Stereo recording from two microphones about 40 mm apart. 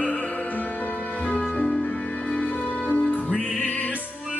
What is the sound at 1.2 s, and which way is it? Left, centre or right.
Music, left.